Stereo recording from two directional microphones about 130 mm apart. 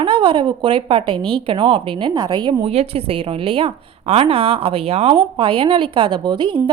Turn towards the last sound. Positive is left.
turn(degrees=-35)  # may be behind; listen again after turning